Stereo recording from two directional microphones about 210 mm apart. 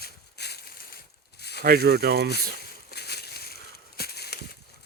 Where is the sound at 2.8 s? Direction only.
50° left (ahead or behind).